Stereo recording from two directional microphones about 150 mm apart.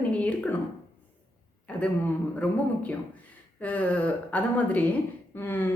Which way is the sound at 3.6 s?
10° left (ahead or behind).